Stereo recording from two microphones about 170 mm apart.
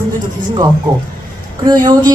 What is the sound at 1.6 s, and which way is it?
Speech, 25° right (ahead or behind).